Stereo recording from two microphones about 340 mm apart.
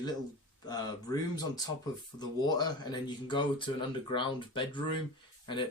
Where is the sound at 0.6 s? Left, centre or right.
Centre.